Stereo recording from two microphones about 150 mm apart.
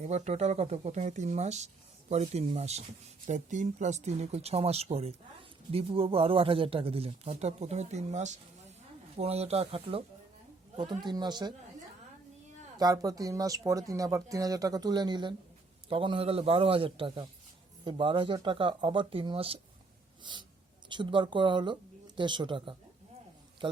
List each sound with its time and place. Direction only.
0.0 s speech: 50° right (ahead or behind)
10.8 s speech: 30° right (ahead or behind)
12.7 s speech: 25° right (ahead or behind)